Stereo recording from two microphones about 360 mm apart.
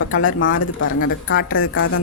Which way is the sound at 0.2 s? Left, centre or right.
Left.